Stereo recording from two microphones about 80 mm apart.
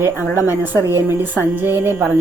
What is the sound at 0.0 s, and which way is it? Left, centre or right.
A woman's voice, right.